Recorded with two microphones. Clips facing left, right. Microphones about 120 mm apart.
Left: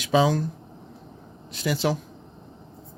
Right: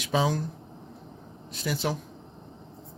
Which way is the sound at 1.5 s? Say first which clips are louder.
Left 5 dB; 90° left.